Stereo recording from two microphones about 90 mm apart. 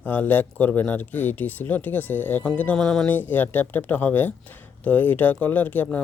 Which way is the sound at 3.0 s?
20° left (ahead or behind).